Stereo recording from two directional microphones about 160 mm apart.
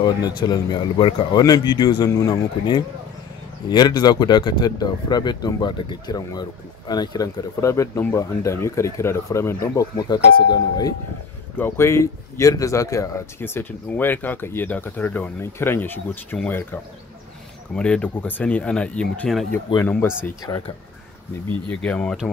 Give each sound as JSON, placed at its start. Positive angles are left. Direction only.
{"t": 0.0, "sound": "speech", "side_deg": 30}
{"t": 11.5, "sound": "speech", "side_deg": 15}
{"t": 21.6, "sound": "speech", "side_deg": 5}